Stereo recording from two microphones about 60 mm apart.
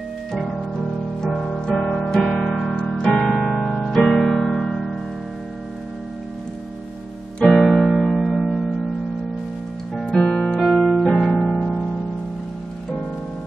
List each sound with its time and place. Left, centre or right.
1.2 s music: centre
7.3 s piano: centre
7.6 s music: centre
10.0 s music: centre
10.6 s keyboard: centre
11.2 s music: centre